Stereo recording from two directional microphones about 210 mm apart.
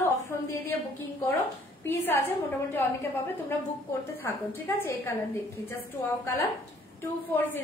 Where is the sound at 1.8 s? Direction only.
10° left (ahead or behind).